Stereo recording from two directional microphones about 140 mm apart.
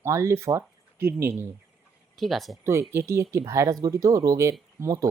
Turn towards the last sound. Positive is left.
turn(degrees=-25)  # may be behind; listen again after turning